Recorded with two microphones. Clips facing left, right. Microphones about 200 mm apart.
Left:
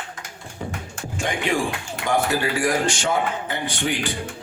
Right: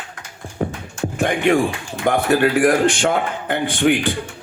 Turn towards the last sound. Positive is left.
turn(degrees=-55)  # may be behind; listen again after turning